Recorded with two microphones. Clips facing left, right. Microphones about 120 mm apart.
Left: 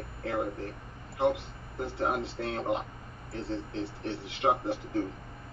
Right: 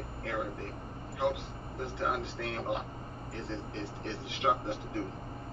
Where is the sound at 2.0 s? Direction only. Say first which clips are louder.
Left 3 dB; 35° left (ahead or behind).